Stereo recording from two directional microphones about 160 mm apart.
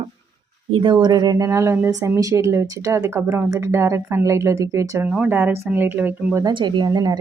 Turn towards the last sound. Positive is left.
turn(degrees=-25)  # may be behind; listen again after turning